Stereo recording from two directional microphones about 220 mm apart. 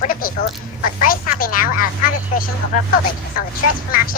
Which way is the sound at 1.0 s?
40° left (ahead or behind).